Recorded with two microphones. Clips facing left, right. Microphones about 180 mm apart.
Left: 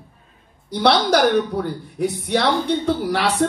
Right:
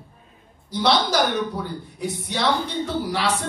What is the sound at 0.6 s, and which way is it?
A man's voice, 60° left (ahead or behind).